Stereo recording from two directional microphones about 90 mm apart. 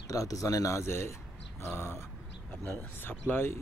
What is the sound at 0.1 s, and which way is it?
Speech, 40° left (ahead or behind).